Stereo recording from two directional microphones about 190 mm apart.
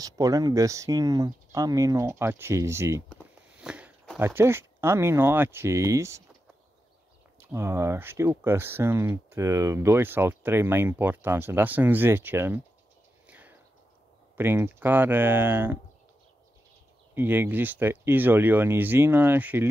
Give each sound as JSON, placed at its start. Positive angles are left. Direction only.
{"t": 0.0, "sound": "speech", "side_deg": -20}
{"t": 3.6, "sound": "walk", "side_deg": -5}
{"t": 4.2, "sound": "speech", "side_deg": -10}
{"t": 7.3, "sound": "speech", "side_deg": -15}
{"t": 13.3, "sound": "a sound", "side_deg": -10}
{"t": 14.3, "sound": "speech", "side_deg": -10}
{"t": 17.1, "sound": "speech", "side_deg": -10}